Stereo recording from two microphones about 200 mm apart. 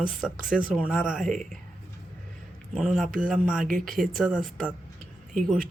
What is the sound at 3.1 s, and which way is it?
Speech, 40° right (ahead or behind).